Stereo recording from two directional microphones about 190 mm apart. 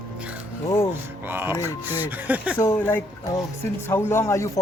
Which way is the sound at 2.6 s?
15° left (ahead or behind).